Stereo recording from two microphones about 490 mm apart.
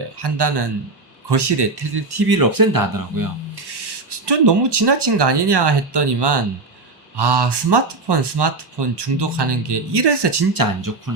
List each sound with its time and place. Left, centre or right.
0.2 s speech: right
4.3 s speech: right